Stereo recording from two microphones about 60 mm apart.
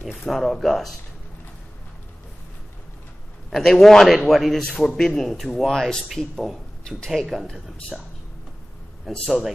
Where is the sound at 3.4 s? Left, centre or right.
Centre.